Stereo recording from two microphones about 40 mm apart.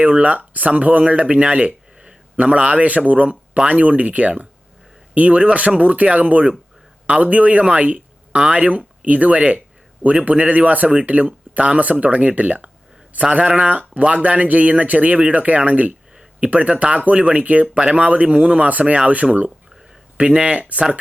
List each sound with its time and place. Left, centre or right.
0.0 s speech: right